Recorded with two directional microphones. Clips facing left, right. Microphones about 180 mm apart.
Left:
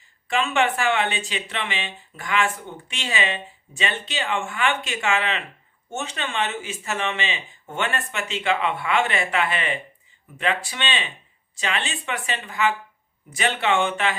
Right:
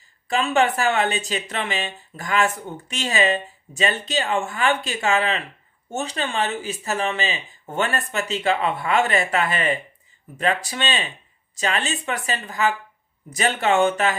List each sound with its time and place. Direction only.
0.3 s speech: 35° right (ahead or behind)